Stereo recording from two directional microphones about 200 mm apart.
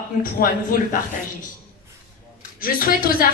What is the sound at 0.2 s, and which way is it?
Speech, 45° left (ahead or behind).